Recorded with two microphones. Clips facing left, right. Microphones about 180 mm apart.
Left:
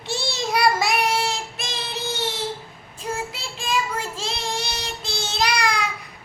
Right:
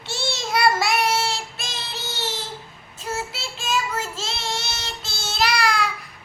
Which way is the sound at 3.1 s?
15° left (ahead or behind).